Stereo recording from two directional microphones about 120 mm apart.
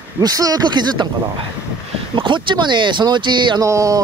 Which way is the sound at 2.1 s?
40° right (ahead or behind).